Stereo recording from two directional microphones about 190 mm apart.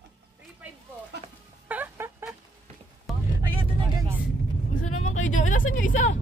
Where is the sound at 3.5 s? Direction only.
30° right (ahead or behind).